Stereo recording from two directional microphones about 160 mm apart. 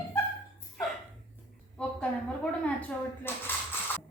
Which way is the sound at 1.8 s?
5° left (ahead or behind).